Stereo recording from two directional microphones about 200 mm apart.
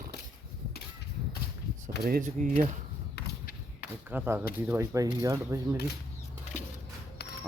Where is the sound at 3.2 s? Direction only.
55° left (ahead or behind).